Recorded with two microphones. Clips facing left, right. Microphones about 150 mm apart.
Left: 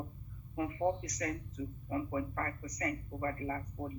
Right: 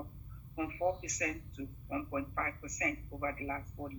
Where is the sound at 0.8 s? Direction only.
50° left (ahead or behind).